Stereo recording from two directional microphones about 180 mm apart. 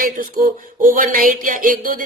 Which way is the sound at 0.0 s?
55° right (ahead or behind).